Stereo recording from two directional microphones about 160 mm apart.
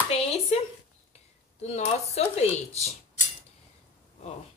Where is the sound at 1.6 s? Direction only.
45° left (ahead or behind).